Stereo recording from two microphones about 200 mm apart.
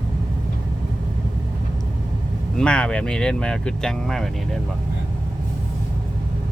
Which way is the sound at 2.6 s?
5° left (ahead or behind).